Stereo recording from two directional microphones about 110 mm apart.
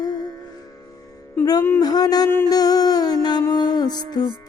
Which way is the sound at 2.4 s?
35° left (ahead or behind).